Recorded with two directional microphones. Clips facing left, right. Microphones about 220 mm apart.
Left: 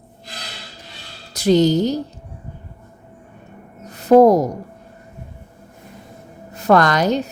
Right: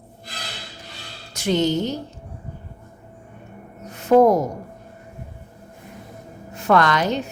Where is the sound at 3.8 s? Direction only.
35° left (ahead or behind).